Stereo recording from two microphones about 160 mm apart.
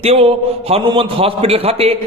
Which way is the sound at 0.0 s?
40° right (ahead or behind).